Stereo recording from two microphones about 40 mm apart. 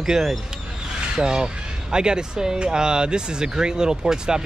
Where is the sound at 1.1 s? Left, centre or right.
Centre.